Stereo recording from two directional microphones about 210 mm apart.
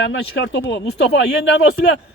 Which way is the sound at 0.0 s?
60° left (ahead or behind).